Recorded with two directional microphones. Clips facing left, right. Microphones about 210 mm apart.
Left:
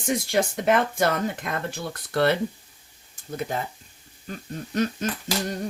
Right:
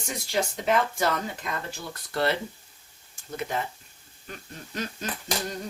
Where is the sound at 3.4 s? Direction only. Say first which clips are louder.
Left 1 dB; 40° left (ahead or behind).